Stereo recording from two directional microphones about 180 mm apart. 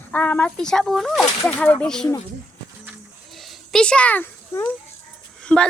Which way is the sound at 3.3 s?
Centre (ahead or behind).